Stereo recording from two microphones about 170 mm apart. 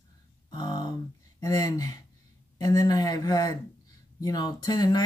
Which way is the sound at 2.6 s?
20° left (ahead or behind).